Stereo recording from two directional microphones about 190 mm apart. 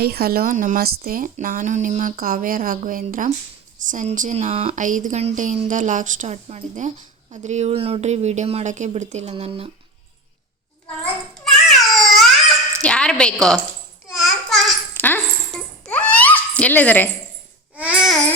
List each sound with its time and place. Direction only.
0.0 s a woman's voice: 55° right (ahead or behind); by 9.6 s 30° right (ahead or behind)
11.0 s a child's voice: centre (ahead or behind)
11.9 s crying: centre (ahead or behind)
12.8 s a woman's voice: 5° left (ahead or behind)
14.1 s babbling: centre (ahead or behind)
17.7 s babbling: 5° right (ahead or behind)